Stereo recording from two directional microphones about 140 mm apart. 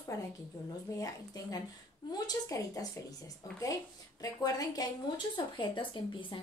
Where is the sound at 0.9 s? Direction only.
25° left (ahead or behind).